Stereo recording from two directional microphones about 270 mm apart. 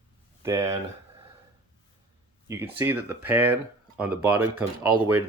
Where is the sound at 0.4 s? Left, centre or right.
Centre.